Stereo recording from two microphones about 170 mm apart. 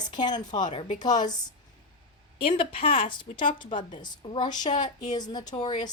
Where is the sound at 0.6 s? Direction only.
45° left (ahead or behind).